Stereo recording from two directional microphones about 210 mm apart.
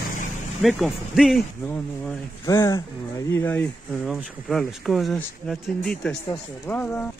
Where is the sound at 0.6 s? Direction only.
Centre (ahead or behind).